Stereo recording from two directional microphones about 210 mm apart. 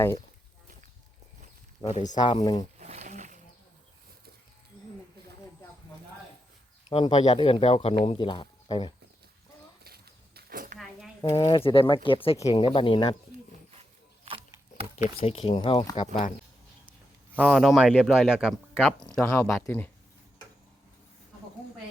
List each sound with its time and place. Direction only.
1.8 s speech: 30° left (ahead or behind)
2.0 s speech: 20° left (ahead or behind)
2.7 s a sound: 30° right (ahead or behind)
6.9 s speech: 20° left (ahead or behind)
9.8 s walk: 45° right (ahead or behind)
11.2 s speech: 20° left (ahead or behind)
15.2 s speech: 25° left (ahead or behind)
17.3 s speech: centre (ahead or behind)
19.1 s speech: 10° left (ahead or behind)